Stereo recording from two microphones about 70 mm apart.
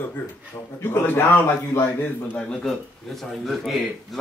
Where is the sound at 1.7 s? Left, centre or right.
Left.